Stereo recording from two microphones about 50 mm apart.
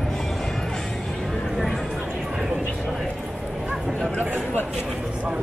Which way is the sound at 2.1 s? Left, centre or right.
Centre.